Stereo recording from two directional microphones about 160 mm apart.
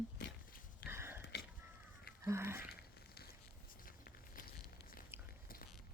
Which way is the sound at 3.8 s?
60° left (ahead or behind).